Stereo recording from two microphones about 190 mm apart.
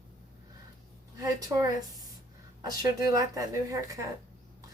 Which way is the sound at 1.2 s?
20° right (ahead or behind).